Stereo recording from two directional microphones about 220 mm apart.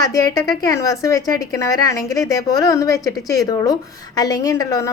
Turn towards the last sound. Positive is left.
turn(degrees=15)  # may be behind; listen again after turning